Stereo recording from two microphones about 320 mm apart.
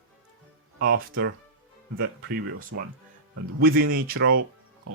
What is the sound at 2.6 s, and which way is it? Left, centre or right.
Speech, right.